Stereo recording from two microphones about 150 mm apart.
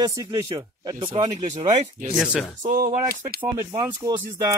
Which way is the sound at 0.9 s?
35° right (ahead or behind).